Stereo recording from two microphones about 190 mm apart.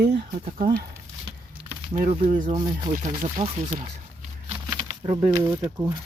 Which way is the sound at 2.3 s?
45° right (ahead or behind).